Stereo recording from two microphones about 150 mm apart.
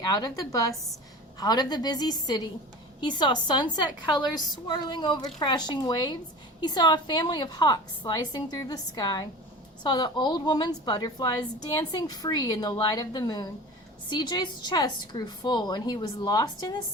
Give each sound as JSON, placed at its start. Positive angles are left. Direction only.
{"t": 0.0, "sound": "a woman's voice", "side_deg": 25}